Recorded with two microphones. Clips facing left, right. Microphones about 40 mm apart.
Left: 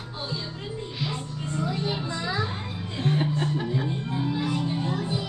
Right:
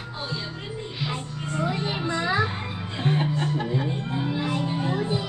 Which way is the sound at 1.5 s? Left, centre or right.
Right.